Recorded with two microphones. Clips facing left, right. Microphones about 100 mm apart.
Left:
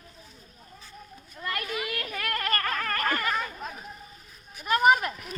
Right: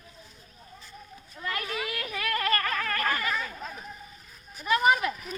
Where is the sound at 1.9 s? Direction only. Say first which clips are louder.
Even; 55° left (ahead or behind).